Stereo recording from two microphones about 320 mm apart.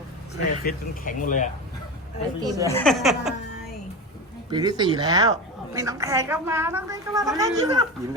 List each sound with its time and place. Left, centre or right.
0.6 s speech: left
2.4 s a woman's voice: centre
2.6 s speech: centre
4.5 s a woman's voice: centre